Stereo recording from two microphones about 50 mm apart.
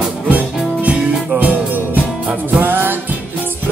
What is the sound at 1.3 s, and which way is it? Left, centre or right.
Music, right.